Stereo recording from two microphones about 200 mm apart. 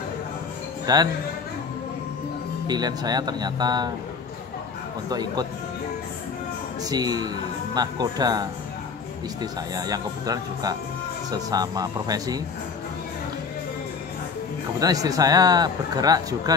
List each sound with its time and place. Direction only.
0.9 s speech: 20° right (ahead or behind)
2.6 s speech: 20° right (ahead or behind)
5.1 s speech: 20° right (ahead or behind)
6.8 s speech: 20° right (ahead or behind)
14.8 s speech: 20° right (ahead or behind)